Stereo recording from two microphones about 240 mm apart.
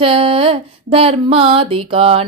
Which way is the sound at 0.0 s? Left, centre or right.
Right.